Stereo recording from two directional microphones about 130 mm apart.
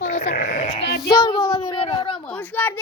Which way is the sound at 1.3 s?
45° left (ahead or behind).